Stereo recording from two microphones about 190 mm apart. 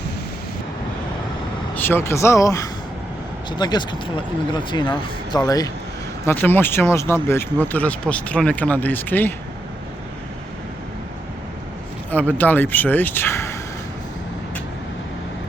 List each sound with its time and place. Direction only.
1.7 s speech: 10° left (ahead or behind)
12.4 s speech: 10° left (ahead or behind)